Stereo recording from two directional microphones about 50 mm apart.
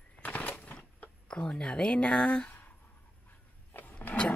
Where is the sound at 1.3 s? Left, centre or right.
Centre.